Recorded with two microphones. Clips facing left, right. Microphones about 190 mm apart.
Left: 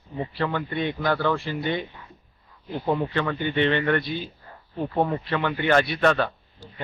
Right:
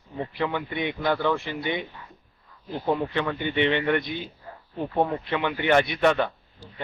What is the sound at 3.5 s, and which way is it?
Speech, 15° right (ahead or behind).